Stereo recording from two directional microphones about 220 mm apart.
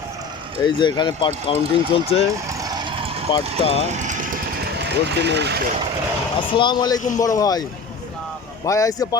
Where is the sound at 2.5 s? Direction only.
15° right (ahead or behind).